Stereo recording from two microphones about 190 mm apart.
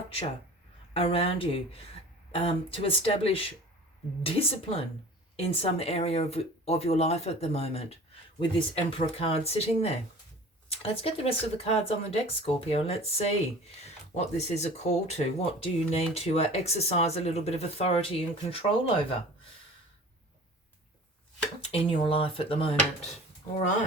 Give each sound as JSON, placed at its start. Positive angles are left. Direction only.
{"t": 0.9, "sound": "speech", "side_deg": 30}
{"t": 21.7, "sound": "speech", "side_deg": 30}